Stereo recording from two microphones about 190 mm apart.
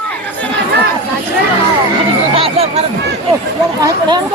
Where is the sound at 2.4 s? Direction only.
30° right (ahead or behind).